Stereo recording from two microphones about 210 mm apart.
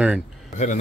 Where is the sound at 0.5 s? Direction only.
35° left (ahead or behind).